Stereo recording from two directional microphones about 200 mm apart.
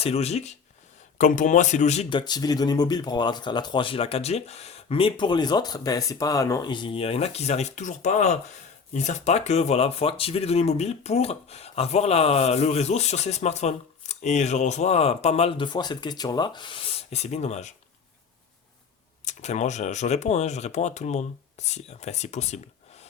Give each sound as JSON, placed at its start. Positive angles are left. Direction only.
{"t": 0.0, "sound": "speech", "side_deg": 30}
{"t": 19.2, "sound": "speech", "side_deg": 35}